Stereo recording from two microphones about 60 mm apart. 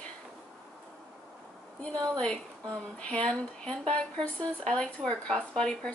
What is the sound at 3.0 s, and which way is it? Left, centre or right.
Speech, centre.